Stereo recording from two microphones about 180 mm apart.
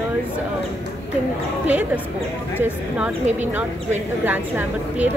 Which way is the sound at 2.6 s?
10° right (ahead or behind).